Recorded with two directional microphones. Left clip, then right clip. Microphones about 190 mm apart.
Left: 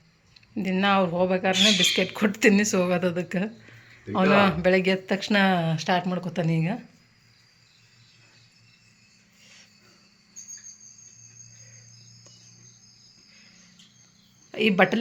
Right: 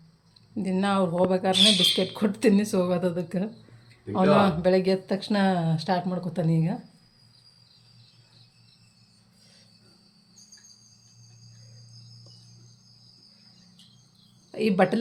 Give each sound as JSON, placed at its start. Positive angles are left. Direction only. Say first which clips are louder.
{"t": 0.5, "sound": "speech", "louder": "left 4 dB", "side_deg": -5}
{"t": 14.5, "sound": "speech", "louder": "left 2 dB", "side_deg": 0}